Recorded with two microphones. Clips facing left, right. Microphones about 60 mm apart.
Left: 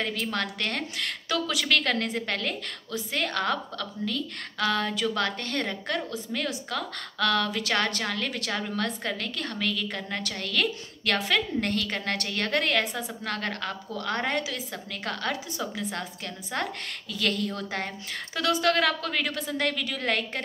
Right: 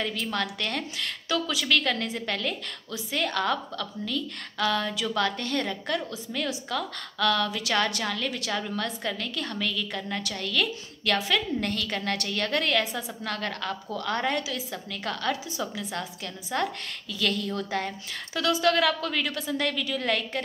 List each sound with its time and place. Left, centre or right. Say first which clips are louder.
0.0 s a woman's voice: even; left